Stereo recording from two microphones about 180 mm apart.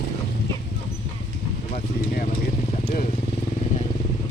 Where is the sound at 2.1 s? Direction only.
50° left (ahead or behind).